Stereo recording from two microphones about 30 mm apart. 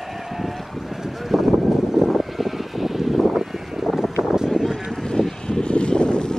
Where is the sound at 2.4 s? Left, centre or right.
Centre.